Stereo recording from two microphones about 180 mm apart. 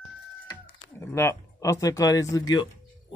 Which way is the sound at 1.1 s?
15° left (ahead or behind).